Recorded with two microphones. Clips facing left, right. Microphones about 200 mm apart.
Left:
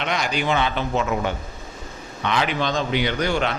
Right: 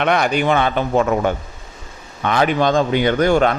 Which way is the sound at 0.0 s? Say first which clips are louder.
Right 7 dB; 55° right (ahead or behind).